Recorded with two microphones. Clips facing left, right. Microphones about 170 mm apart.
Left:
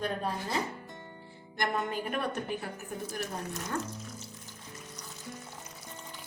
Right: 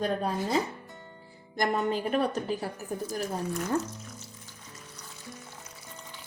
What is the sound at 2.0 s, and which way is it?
Speech, 35° right (ahead or behind).